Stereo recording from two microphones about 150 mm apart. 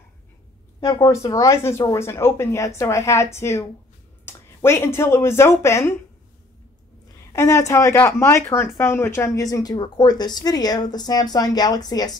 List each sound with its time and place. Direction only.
0.8 s speech: 25° left (ahead or behind)
7.3 s speech: 20° left (ahead or behind)